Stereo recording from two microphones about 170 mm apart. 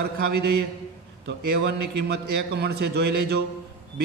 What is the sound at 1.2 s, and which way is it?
A man's voice, 90° right.